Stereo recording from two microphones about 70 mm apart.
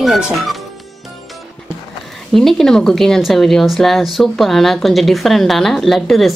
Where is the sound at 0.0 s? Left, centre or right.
Centre.